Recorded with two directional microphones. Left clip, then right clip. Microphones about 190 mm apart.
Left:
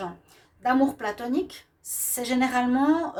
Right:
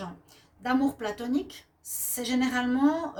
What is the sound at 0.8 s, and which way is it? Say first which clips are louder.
A woman's voice: left 4 dB; 40° left (ahead or behind).